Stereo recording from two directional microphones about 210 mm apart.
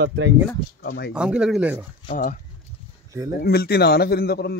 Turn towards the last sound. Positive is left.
turn(degrees=50)  # may be behind; listen again after turning